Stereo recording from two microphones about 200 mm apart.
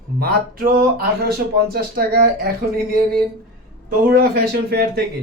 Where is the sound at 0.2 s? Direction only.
45° right (ahead or behind).